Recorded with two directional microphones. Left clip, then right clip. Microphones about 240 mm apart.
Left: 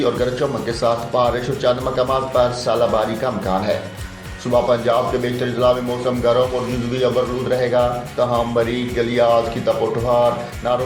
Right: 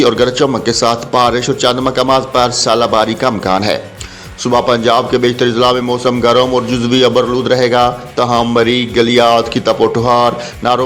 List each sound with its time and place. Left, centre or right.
0.0 s a man's voice: right
7.5 s a man's voice: right